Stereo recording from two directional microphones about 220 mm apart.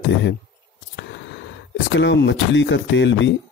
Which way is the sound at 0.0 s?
55° left (ahead or behind).